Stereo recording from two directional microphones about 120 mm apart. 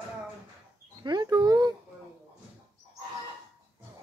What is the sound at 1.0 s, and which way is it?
Dog, 35° right (ahead or behind).